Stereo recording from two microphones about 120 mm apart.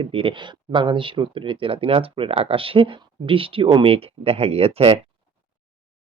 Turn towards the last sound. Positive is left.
turn(degrees=-55)  # may be behind; listen again after turning